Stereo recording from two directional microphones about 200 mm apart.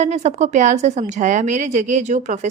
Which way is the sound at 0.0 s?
35° right (ahead or behind).